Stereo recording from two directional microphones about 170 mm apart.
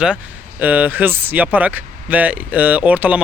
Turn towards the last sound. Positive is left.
turn(degrees=-10)  # may be behind; listen again after turning